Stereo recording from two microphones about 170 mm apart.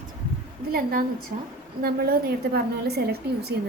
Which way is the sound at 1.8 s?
60° right (ahead or behind).